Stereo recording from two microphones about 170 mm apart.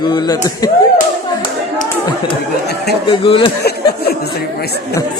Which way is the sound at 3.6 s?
70° left (ahead or behind).